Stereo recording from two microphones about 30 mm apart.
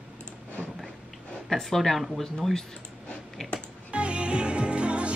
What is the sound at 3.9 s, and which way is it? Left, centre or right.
Music, right.